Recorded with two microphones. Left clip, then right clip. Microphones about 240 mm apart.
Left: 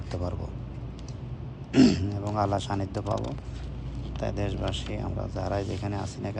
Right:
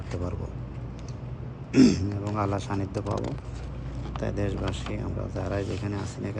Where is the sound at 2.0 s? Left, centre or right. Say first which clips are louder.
Left 1 dB; right.